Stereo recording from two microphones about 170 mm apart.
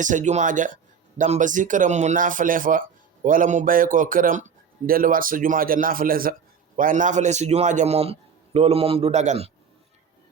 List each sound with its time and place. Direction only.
0.0 s a man's voice: 45° right (ahead or behind)